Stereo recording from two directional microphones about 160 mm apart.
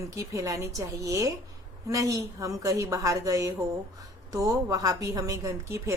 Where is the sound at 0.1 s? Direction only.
20° right (ahead or behind).